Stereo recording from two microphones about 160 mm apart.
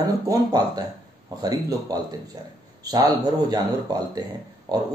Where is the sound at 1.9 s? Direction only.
25° right (ahead or behind).